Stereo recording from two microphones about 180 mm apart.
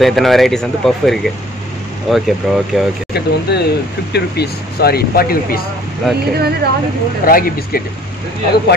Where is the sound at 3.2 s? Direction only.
65° left (ahead or behind).